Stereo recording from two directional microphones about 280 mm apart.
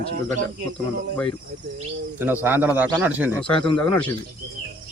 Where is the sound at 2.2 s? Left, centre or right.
Centre.